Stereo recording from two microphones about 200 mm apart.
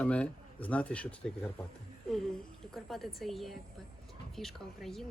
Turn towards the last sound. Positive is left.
turn(degrees=0)  # may be behind; listen again after turning